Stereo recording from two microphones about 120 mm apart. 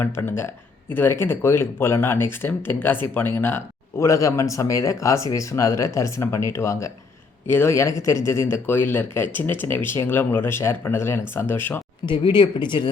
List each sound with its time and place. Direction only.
0.0 s a man's voice: 20° left (ahead or behind)
12.0 s speech: 40° left (ahead or behind)